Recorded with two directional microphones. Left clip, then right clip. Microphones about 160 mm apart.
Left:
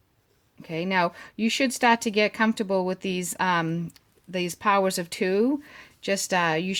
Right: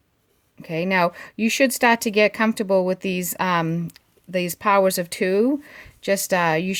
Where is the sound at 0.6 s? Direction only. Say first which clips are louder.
Right 4 dB; 40° right (ahead or behind).